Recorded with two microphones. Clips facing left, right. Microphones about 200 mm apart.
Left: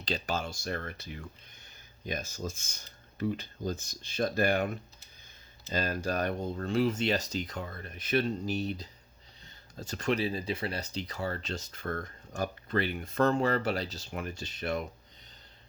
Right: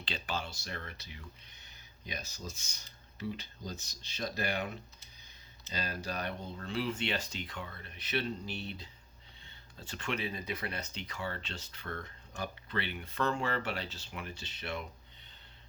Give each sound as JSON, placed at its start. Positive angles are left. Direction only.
{"t": 0.0, "sound": "speech", "side_deg": 40}